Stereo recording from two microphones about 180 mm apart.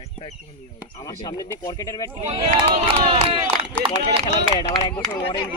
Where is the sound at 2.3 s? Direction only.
30° right (ahead or behind).